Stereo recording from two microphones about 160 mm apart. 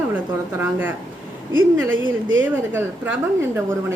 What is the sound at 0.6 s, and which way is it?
Speech, 10° right (ahead or behind).